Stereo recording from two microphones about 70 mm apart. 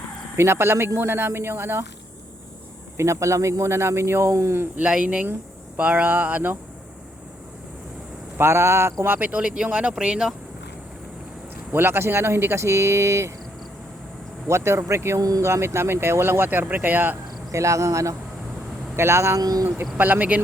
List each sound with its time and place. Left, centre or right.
0.3 s speech: right
3.0 s speech: right
4.8 s speech: centre
8.4 s speech: right
9.0 s speech: right
11.7 s speech: right
14.4 s speech: right
17.5 s speech: right
19.4 s speech: right
19.6 s speech: right